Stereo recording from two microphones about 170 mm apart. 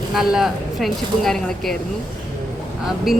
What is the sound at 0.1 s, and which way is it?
Speech, centre (ahead or behind).